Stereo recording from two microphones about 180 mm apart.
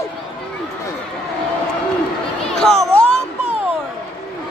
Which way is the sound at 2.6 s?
5° left (ahead or behind).